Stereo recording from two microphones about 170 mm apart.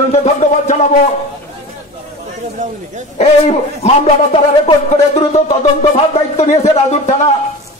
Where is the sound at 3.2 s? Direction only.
35° left (ahead or behind).